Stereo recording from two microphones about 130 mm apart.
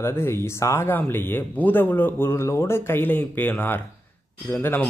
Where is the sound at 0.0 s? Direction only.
20° left (ahead or behind).